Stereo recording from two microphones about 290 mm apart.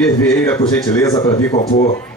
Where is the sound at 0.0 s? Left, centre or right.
Centre.